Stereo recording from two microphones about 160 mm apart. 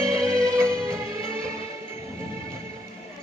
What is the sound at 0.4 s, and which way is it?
Music, 15° right (ahead or behind).